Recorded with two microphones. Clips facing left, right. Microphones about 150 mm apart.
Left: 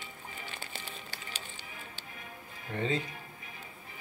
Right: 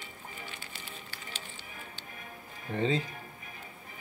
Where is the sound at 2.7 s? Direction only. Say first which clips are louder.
Right 3 dB; 30° right (ahead or behind).